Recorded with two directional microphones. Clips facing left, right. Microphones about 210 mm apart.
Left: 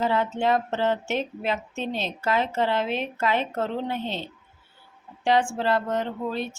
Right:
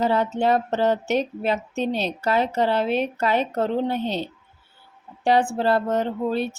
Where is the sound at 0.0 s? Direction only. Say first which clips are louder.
Right 3 dB; 40° right (ahead or behind).